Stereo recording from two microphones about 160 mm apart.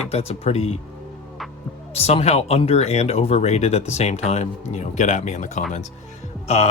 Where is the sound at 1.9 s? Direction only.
40° left (ahead or behind).